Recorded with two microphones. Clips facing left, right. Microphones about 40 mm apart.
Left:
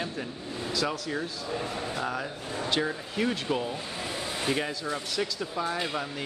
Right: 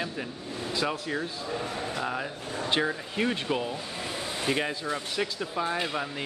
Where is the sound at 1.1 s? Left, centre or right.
Centre.